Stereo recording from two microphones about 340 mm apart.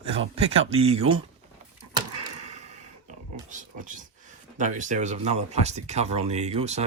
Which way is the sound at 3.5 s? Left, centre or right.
Right.